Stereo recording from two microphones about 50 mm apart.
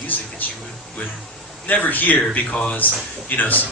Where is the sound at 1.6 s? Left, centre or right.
Left.